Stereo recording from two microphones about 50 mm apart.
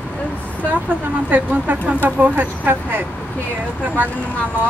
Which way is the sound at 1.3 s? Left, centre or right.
Right.